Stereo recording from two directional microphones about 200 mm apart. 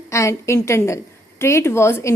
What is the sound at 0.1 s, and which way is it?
A woman's voice, 15° left (ahead or behind).